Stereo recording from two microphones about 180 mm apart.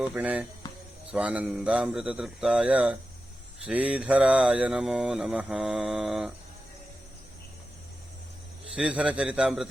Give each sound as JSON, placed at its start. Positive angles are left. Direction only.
{"t": 0.0, "sound": "a man's voice", "side_deg": -10}
{"t": 0.6, "sound": "music", "side_deg": 20}
{"t": 1.1, "sound": "a man's voice", "side_deg": -5}
{"t": 3.7, "sound": "mantra", "side_deg": -5}
{"t": 8.7, "sound": "mantra", "side_deg": -5}